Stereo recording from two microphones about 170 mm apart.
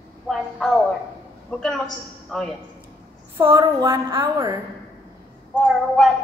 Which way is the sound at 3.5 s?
25° right (ahead or behind).